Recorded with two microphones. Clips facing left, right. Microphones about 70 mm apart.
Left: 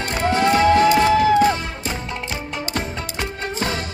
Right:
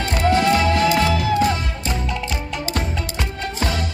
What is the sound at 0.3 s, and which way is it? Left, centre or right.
Music, left.